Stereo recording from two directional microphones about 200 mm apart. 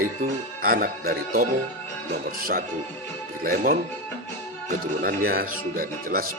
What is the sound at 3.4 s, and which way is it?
Speech, 45° right (ahead or behind).